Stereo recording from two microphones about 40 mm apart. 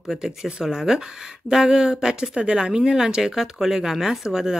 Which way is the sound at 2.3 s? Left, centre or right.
Right.